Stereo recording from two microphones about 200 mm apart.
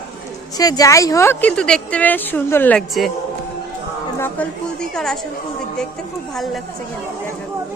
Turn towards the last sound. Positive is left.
turn(degrees=0)  # may be behind; listen again after turning